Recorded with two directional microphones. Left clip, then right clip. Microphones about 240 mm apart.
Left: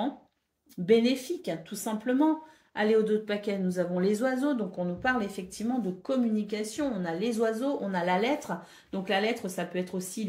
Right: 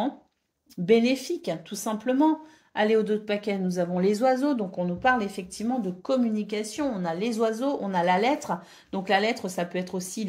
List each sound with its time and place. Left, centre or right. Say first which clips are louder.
0.8 s speech: right 2 dB; right